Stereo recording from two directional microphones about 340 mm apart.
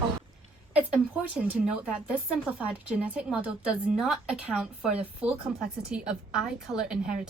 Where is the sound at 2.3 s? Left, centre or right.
Centre.